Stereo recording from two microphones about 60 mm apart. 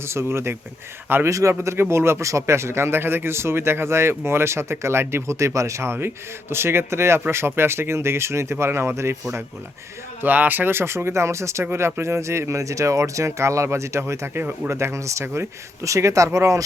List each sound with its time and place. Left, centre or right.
0.0 s speech: right
1.3 s speech: right
10.2 s speech: right
11.7 s speech: right
15.8 s speech: right